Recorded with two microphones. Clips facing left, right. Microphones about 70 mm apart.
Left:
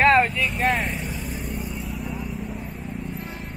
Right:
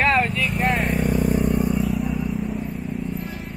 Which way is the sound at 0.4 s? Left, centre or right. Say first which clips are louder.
Right 1 dB; centre.